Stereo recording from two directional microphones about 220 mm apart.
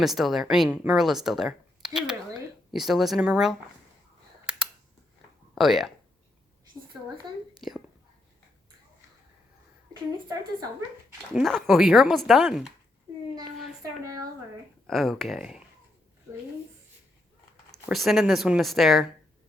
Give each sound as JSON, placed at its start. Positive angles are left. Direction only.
{"t": 0.0, "sound": "speech", "side_deg": 0}
{"t": 4.4, "sound": "a sound", "side_deg": -5}
{"t": 5.5, "sound": "speech", "side_deg": 0}
{"t": 7.6, "sound": "whispering", "side_deg": 0}
{"t": 9.9, "sound": "a woman's voice", "side_deg": -15}
{"t": 11.3, "sound": "speech", "side_deg": 0}
{"t": 14.8, "sound": "speech", "side_deg": 0}
{"t": 17.7, "sound": "speech", "side_deg": 0}